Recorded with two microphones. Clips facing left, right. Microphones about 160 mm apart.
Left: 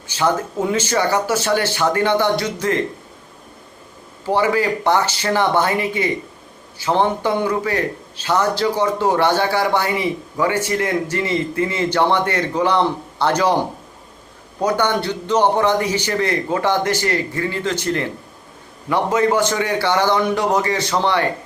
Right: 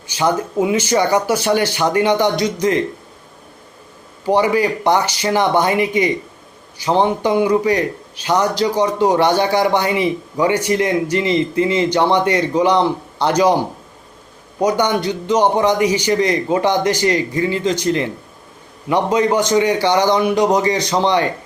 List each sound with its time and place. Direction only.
0.2 s a man's voice: 15° right (ahead or behind)
4.3 s a man's voice: 15° right (ahead or behind)
14.6 s a man's voice: 15° right (ahead or behind)